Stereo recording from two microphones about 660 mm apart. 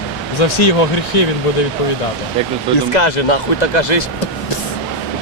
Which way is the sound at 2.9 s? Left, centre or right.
Left.